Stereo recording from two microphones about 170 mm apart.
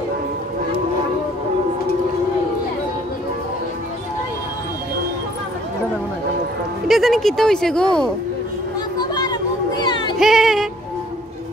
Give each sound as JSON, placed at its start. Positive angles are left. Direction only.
{"t": 6.9, "sound": "speech", "side_deg": 0}
{"t": 9.1, "sound": "a sound", "side_deg": 25}
{"t": 10.1, "sound": "female singing", "side_deg": 0}